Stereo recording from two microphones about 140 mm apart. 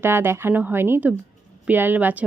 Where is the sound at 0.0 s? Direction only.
15° right (ahead or behind).